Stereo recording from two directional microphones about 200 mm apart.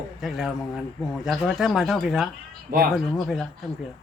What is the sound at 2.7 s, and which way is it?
Speech, 45° right (ahead or behind).